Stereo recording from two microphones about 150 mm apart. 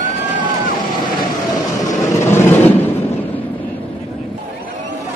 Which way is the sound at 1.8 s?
20° left (ahead or behind).